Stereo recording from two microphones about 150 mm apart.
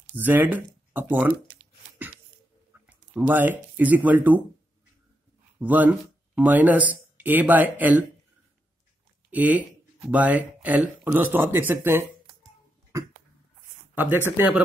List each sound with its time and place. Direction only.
0.1 s a sound: 10° right (ahead or behind)
2.9 s speech: 10° right (ahead or behind)
5.6 s speech: 10° right (ahead or behind)
9.3 s speech: 10° right (ahead or behind)
12.9 s cough: 20° right (ahead or behind)
13.9 s speech: 10° right (ahead or behind)